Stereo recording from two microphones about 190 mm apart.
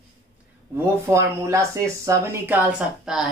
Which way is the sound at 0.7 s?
15° right (ahead or behind).